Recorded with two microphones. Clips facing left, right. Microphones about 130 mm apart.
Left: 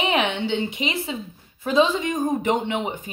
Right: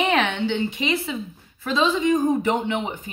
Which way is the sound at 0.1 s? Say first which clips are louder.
Right 1 dB; 20° left (ahead or behind).